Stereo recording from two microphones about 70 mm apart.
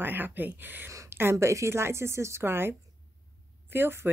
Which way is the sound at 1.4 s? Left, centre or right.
Right.